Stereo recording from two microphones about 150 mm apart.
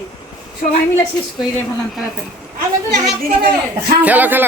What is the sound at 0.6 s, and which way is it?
Speech, 60° left (ahead or behind).